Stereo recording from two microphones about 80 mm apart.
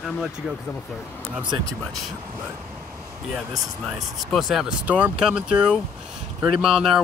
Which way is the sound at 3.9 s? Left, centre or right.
Centre.